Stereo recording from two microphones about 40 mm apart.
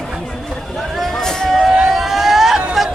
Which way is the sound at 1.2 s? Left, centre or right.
Centre.